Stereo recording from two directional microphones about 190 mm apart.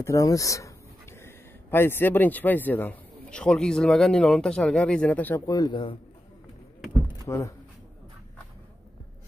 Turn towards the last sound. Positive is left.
turn(degrees=15)  # may be behind; listen again after turning